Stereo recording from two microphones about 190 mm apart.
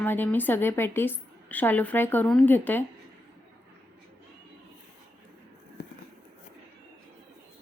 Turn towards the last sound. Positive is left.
turn(degrees=60)  # may be behind; listen again after turning